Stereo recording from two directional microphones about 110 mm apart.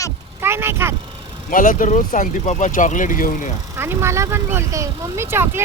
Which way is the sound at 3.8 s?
20° right (ahead or behind).